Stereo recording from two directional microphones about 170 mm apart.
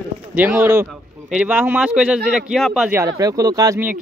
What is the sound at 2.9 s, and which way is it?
Speech, 20° right (ahead or behind).